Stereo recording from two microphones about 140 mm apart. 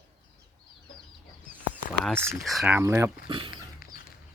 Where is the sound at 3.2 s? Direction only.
35° right (ahead or behind).